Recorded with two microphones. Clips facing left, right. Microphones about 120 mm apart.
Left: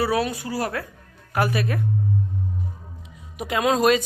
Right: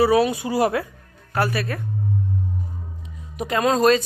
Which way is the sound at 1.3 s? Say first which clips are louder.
Even; 15° left (ahead or behind).